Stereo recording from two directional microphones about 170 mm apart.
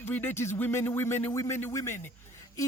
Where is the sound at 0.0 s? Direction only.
10° left (ahead or behind).